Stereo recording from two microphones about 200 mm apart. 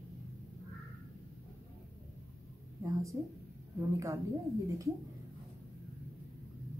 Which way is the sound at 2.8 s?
15° right (ahead or behind).